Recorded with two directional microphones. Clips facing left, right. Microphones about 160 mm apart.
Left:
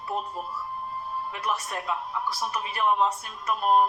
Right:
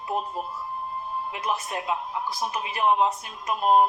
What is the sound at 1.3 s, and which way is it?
A woman's voice, 20° right (ahead or behind).